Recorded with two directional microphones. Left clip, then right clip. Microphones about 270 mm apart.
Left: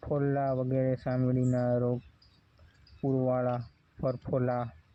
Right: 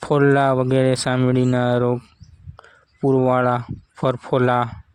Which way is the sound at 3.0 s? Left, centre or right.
Right.